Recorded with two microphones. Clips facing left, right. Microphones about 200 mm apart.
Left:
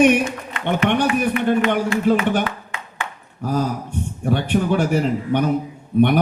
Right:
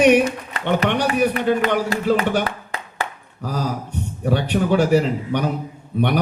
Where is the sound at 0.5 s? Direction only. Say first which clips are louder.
Left 1 dB; 35° right (ahead or behind).